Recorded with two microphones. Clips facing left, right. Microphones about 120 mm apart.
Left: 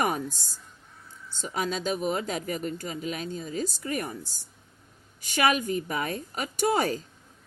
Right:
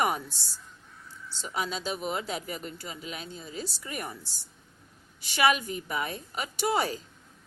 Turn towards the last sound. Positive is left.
turn(degrees=45)  # may be behind; listen again after turning